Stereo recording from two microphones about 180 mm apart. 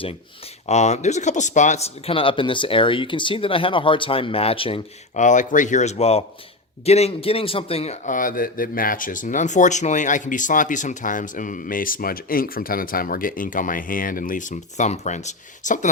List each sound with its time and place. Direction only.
0.7 s a man's voice: 40° left (ahead or behind)